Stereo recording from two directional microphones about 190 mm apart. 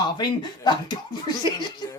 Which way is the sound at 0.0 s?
25° left (ahead or behind).